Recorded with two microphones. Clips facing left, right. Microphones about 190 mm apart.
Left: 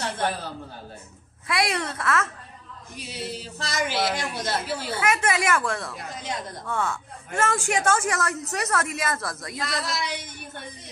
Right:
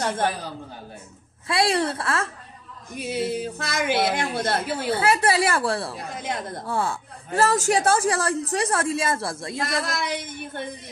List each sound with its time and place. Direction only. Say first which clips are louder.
1.5 s a man's voice: right 4 dB; 30° right (ahead or behind)
3.0 s a sound: right 9 dB; 55° right (ahead or behind)
4.9 s a man's voice: right 4 dB; 35° right (ahead or behind)
6.1 s a sound: right 2 dB; 55° right (ahead or behind)
6.6 s a man's voice: right 1 dB; 30° right (ahead or behind)
9.7 s speech: right 2 dB; 55° right (ahead or behind)